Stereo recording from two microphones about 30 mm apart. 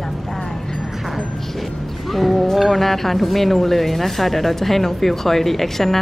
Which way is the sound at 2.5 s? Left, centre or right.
Centre.